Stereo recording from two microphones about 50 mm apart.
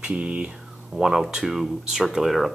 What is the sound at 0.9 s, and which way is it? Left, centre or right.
Speech, centre.